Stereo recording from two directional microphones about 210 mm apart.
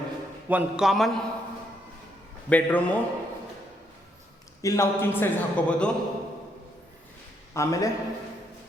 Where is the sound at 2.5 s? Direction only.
5° left (ahead or behind).